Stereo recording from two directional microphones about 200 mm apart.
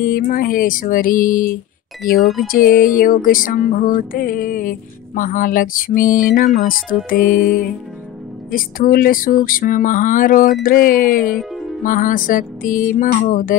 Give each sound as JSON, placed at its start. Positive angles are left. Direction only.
{"t": 0.0, "sound": "music", "side_deg": 45}
{"t": 2.1, "sound": "music", "side_deg": 0}
{"t": 2.5, "sound": "music", "side_deg": 45}
{"t": 11.3, "sound": "music", "side_deg": 0}
{"t": 11.8, "sound": "music", "side_deg": 40}